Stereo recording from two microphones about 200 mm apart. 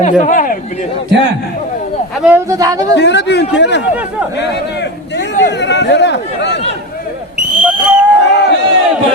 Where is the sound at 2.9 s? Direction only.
60° left (ahead or behind).